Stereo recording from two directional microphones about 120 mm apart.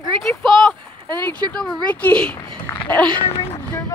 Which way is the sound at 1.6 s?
10° left (ahead or behind).